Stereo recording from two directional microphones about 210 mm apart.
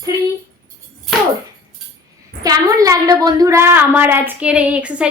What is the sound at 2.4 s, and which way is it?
A woman's voice, 15° right (ahead or behind).